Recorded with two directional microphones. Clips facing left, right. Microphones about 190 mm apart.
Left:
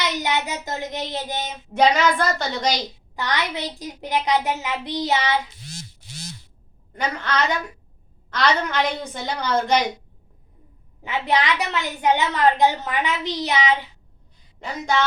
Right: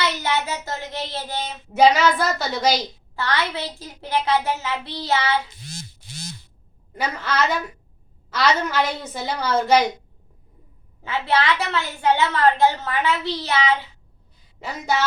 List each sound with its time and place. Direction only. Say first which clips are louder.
0.0 s speech: right 1 dB; 15° left (ahead or behind)
1.7 s a woman's voice: right 2 dB; 5° right (ahead or behind)
3.2 s a woman's voice: right 1 dB; 15° left (ahead or behind)
5.6 s a sound: right 1 dB; 50° right (ahead or behind)
6.9 s a woman's voice: even; 5° right (ahead or behind)
11.0 s a woman's voice: even; 15° left (ahead or behind)